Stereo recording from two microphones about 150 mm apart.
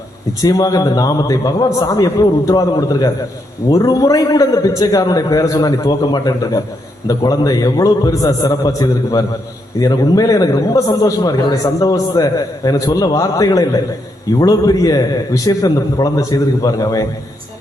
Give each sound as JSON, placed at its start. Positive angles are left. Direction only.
{"t": 0.4, "sound": "a man's voice", "side_deg": 25}